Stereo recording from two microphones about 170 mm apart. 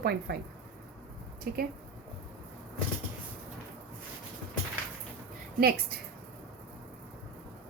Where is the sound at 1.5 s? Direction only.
65° right (ahead or behind).